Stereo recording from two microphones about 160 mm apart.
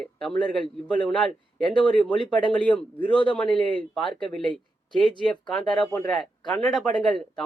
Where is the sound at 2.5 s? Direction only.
5° left (ahead or behind).